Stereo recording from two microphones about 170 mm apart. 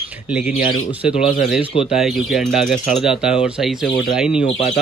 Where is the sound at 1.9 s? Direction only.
Centre (ahead or behind).